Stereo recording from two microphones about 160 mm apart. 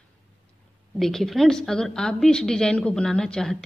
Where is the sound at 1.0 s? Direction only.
Centre (ahead or behind).